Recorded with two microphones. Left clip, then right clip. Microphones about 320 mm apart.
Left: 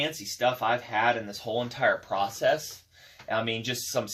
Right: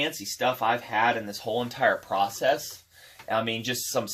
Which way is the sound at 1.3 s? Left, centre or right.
Right.